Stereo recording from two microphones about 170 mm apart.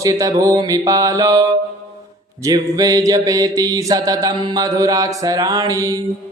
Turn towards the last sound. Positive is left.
turn(degrees=-20)  # may be behind; listen again after turning